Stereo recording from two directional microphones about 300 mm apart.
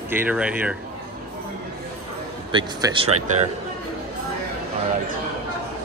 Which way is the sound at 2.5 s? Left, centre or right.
Centre.